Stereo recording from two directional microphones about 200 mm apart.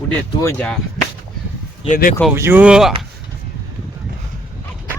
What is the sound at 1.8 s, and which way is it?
Speech, 40° left (ahead or behind).